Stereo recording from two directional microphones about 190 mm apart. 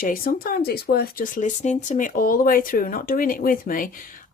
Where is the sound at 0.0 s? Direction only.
50° left (ahead or behind).